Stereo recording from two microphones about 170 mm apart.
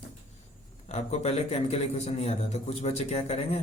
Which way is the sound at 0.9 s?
40° left (ahead or behind).